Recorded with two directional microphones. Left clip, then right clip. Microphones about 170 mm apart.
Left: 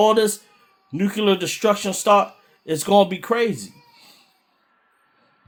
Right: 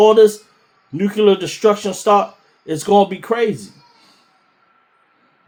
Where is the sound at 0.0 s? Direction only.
45° left (ahead or behind).